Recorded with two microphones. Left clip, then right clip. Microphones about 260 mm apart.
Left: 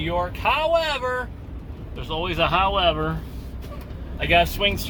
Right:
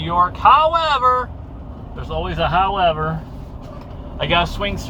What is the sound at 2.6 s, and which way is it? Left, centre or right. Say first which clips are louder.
Speech: right 3 dB; left.